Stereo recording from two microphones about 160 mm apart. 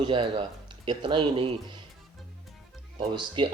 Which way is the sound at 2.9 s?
30° right (ahead or behind).